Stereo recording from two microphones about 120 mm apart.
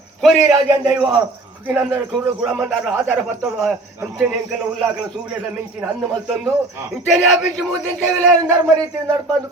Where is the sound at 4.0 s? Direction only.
15° right (ahead or behind).